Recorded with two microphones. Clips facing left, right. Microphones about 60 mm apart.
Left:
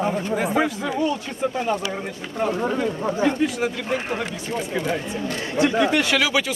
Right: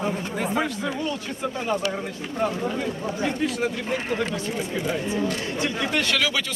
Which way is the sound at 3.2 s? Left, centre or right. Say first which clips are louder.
Left 4 dB; left.